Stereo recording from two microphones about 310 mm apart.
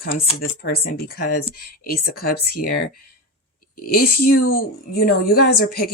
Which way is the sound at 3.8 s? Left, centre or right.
Left.